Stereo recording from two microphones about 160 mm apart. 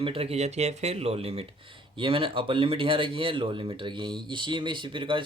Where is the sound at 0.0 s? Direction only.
35° right (ahead or behind).